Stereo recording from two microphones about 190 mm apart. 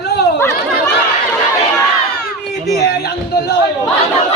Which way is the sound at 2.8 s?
60° left (ahead or behind).